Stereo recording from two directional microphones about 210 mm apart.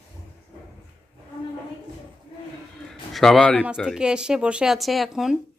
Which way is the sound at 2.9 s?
Centre (ahead or behind).